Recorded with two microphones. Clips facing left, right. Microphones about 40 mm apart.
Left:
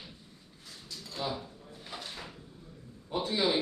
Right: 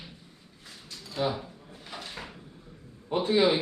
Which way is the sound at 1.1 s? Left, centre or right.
Right.